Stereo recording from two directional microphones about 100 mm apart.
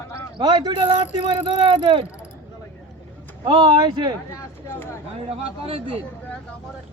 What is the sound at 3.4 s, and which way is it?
Speech, 60° right (ahead or behind).